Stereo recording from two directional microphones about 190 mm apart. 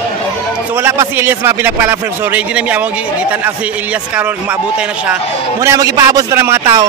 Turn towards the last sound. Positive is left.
turn(degrees=-15)  # may be behind; listen again after turning